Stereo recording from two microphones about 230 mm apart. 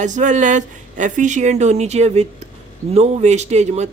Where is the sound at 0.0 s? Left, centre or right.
Right.